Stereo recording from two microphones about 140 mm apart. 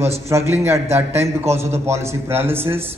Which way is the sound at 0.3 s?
20° right (ahead or behind).